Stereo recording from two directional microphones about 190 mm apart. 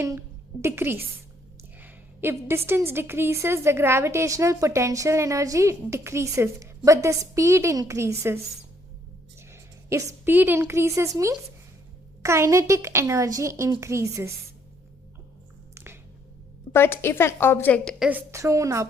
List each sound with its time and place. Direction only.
0.0 s a woman's voice: 15° right (ahead or behind)
9.5 s a woman's voice: 15° right (ahead or behind)
12.2 s a woman's voice: 15° right (ahead or behind)
15.7 s a sound: 10° right (ahead or behind)
16.7 s a woman's voice: 10° left (ahead or behind)
18.0 s a woman's voice: 10° right (ahead or behind)